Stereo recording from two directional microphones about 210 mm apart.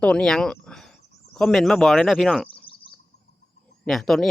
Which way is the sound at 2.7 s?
25° left (ahead or behind).